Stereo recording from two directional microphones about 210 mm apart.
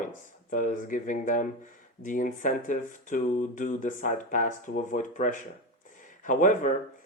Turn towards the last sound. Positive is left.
turn(degrees=40)  # may be behind; listen again after turning